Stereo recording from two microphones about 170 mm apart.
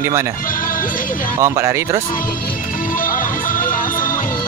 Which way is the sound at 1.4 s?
15° right (ahead or behind).